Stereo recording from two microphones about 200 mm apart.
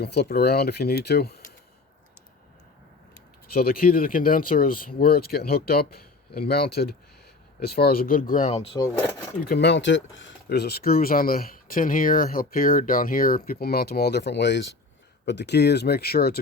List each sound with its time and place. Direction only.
0.0 s speech: 55° left (ahead or behind)
3.5 s speech: 50° left (ahead or behind); by 8.8 s 30° left (ahead or behind)
9.4 s speech: 55° left (ahead or behind)